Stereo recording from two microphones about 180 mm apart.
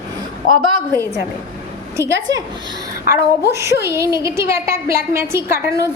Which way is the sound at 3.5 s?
15° right (ahead or behind).